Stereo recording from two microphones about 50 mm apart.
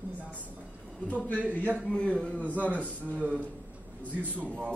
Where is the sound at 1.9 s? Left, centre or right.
Centre.